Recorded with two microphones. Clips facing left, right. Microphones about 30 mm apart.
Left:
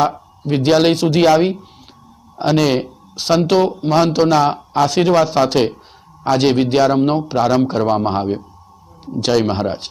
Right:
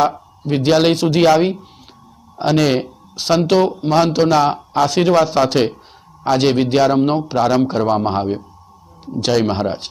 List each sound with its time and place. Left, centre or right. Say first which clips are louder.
0.0 s speech: even; centre